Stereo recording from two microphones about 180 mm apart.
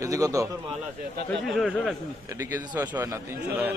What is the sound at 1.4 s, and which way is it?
Speech, centre (ahead or behind).